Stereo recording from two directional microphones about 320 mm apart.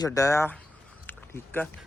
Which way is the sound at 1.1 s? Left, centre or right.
Centre.